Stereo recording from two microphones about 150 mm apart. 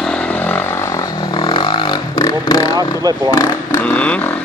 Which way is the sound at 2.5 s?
25° left (ahead or behind).